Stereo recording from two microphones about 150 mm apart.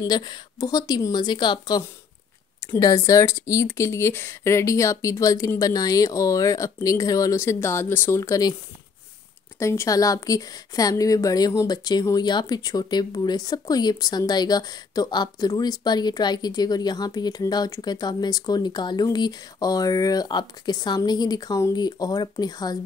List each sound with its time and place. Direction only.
0.0 s a woman's voice: 30° left (ahead or behind)
9.6 s a woman's voice: 20° left (ahead or behind)